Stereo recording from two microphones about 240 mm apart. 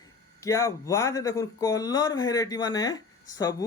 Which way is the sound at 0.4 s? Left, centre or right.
Centre.